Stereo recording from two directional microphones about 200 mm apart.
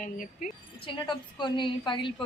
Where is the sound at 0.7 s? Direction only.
25° left (ahead or behind).